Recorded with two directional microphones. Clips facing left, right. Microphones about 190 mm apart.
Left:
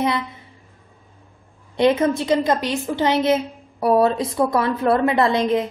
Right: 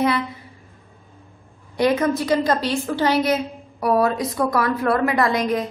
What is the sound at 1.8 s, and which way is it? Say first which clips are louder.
A woman's voice: left 2 dB; 25° left (ahead or behind).